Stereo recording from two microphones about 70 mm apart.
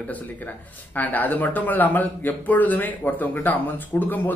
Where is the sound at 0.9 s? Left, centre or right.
Left.